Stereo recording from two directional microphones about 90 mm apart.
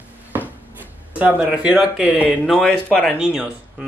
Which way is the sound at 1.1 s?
15° right (ahead or behind).